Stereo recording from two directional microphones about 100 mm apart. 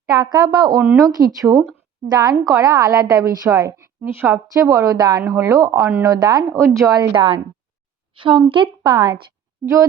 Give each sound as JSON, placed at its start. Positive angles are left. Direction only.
{"t": 0.1, "sound": "a woman's voice", "side_deg": -40}
{"t": 5.2, "sound": "a woman's voice", "side_deg": -25}
{"t": 7.2, "sound": "speech", "side_deg": -60}
{"t": 8.8, "sound": "a woman's voice", "side_deg": -45}